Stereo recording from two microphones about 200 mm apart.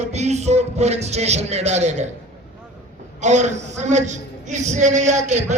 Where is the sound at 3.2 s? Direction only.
35° right (ahead or behind).